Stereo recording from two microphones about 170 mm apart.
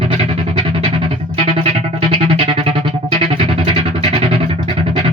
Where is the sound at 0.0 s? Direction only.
30° right (ahead or behind).